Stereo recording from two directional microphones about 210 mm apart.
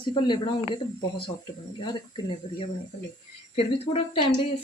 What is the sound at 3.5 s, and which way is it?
Speech, 25° left (ahead or behind).